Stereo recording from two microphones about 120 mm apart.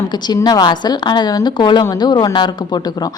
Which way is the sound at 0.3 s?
35° left (ahead or behind).